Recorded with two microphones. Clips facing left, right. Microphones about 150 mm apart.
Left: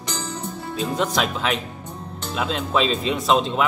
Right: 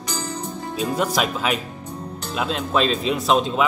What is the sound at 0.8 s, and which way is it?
Speech, 5° right (ahead or behind).